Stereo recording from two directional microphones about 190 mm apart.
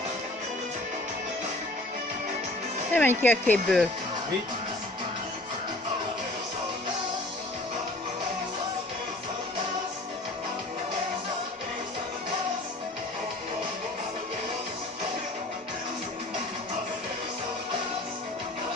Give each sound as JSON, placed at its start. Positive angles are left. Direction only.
{"t": 2.9, "sound": "speech", "side_deg": 10}